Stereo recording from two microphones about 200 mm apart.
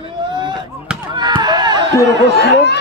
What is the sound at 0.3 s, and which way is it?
Chop, 20° right (ahead or behind).